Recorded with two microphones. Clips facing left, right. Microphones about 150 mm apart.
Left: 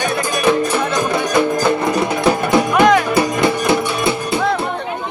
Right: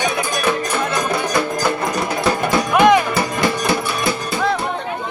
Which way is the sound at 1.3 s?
20° left (ahead or behind).